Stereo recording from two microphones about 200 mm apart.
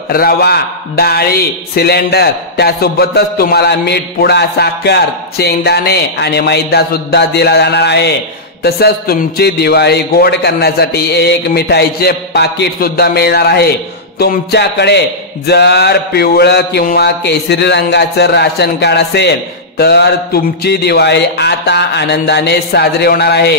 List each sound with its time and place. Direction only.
0.1 s a man's voice: 50° left (ahead or behind)